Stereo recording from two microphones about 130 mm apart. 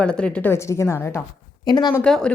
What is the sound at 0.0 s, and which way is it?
Speech, 5° left (ahead or behind).